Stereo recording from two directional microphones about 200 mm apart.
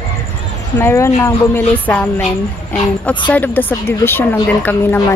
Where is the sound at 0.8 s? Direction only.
15° left (ahead or behind).